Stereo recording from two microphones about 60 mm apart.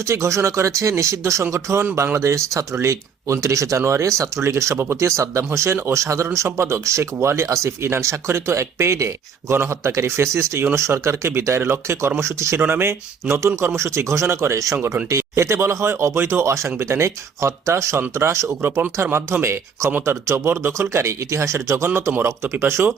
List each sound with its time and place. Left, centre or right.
0.0 s speech: right
12.5 s speech: right
20.5 s speech: right
20.9 s speech: right
22.6 s speech: right